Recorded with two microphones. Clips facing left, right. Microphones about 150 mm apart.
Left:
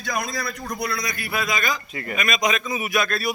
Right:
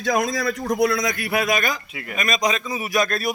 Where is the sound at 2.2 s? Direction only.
35° right (ahead or behind).